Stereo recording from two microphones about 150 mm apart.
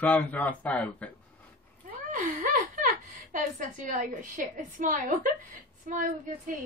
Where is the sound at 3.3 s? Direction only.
60° right (ahead or behind).